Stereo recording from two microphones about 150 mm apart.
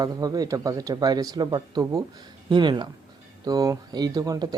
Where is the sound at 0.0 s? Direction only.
25° right (ahead or behind).